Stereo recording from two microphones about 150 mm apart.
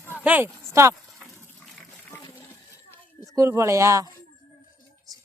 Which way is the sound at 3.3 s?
20° right (ahead or behind).